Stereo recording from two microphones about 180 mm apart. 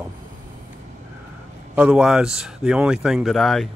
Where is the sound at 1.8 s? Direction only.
5° right (ahead or behind).